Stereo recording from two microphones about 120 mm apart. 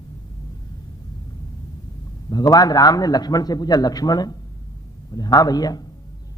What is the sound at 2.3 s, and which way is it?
A man's voice, 35° left (ahead or behind).